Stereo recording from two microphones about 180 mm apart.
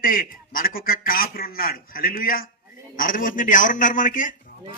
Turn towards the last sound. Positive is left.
turn(degrees=45)  # may be behind; listen again after turning